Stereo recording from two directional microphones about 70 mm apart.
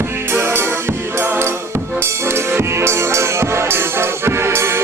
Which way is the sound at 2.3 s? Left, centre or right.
Right.